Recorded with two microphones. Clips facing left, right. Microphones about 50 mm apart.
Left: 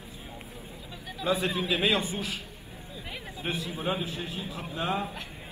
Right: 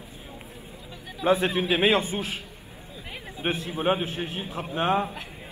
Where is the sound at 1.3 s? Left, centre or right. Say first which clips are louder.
Right 5 dB; right.